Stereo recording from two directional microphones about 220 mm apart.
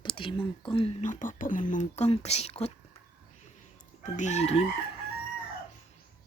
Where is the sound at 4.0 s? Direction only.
35° left (ahead or behind).